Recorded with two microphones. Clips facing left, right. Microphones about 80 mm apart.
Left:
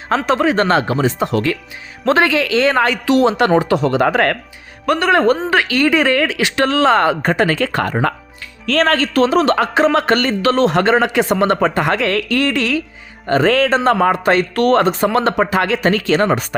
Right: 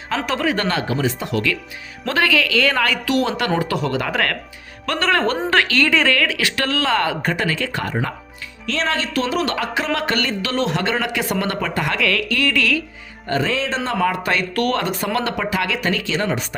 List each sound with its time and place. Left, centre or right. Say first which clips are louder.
0.3 s a man's voice: left 7 dB; left
4.9 s a woman's voice: left 6 dB; centre
13.2 s a man's voice: left 8 dB; left